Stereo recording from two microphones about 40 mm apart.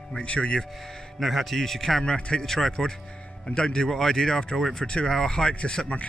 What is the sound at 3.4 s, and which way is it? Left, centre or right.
Speech, left.